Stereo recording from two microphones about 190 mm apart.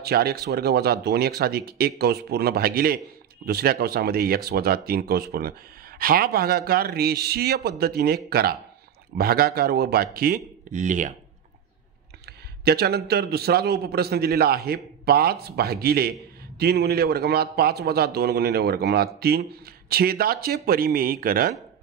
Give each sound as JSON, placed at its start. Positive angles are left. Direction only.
{"t": 0.0, "sound": "a man's voice", "side_deg": -55}
{"t": 12.3, "sound": "a man's voice", "side_deg": -55}